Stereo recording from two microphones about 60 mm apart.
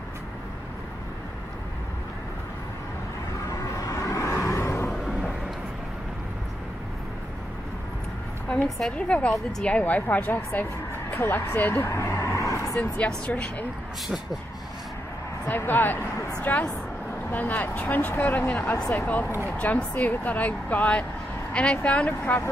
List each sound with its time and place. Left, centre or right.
3.4 s vehicle: left
8.6 s a woman's voice: centre
8.9 s speech: centre
11.8 s vehicle: left
12.9 s speech: left
15.4 s speech: left